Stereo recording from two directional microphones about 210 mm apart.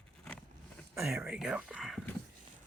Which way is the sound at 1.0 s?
5° right (ahead or behind).